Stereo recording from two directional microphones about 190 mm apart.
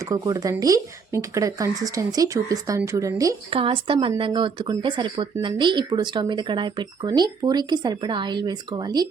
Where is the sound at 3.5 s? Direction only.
30° right (ahead or behind).